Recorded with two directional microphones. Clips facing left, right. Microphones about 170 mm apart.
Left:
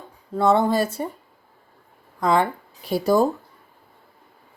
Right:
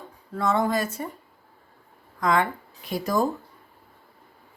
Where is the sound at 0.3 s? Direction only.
30° left (ahead or behind).